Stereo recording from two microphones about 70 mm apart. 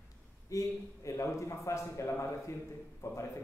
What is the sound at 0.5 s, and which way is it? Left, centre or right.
A man's voice, left.